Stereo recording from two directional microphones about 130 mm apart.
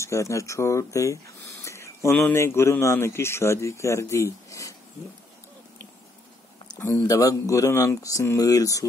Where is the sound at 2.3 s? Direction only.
20° left (ahead or behind).